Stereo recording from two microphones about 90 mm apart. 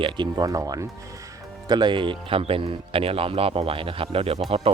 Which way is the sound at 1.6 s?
55° right (ahead or behind).